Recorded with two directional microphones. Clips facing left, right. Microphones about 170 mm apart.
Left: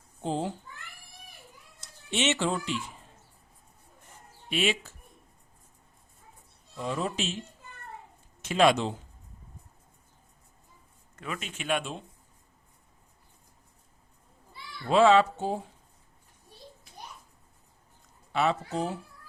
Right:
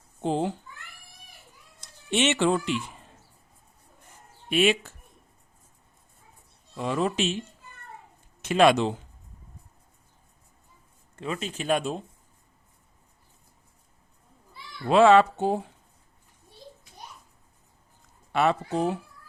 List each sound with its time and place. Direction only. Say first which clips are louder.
0.2 s speech: right 4 dB; 65° right (ahead or behind)
2.0 s speech: right 5 dB; 60° right (ahead or behind)
4.4 s speech: right 6 dB; 55° right (ahead or behind)
6.7 s speech: right 5 dB; 70° right (ahead or behind)
8.4 s speech: right 3 dB; 60° right (ahead or behind)
11.2 s speech: right 6 dB; 30° right (ahead or behind)
14.8 s speech: right 3 dB; 60° right (ahead or behind)
18.3 s speech: right 3 dB; 60° right (ahead or behind)